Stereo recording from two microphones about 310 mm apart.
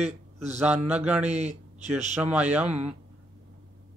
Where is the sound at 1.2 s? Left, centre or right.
Right.